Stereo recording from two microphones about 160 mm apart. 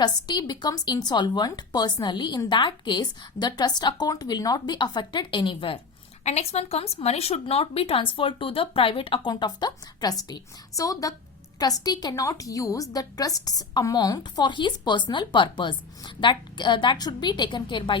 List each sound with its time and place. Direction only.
0.0 s a woman's voice: 25° left (ahead or behind)